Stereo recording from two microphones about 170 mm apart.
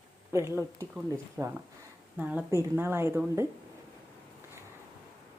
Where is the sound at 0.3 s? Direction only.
15° right (ahead or behind).